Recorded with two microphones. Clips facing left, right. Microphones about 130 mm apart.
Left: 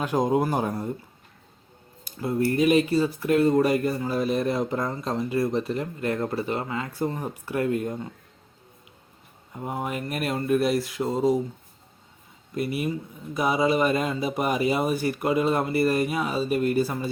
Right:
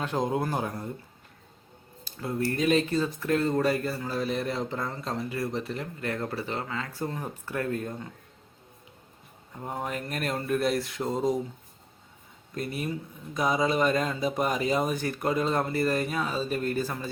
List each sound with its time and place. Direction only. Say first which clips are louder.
0.0 s speech: left 5 dB; 10° left (ahead or behind)
2.0 s speech: left 5 dB; 15° left (ahead or behind)
9.6 s speech: left 3 dB; 10° left (ahead or behind)
12.5 s speech: left 5 dB; 5° left (ahead or behind)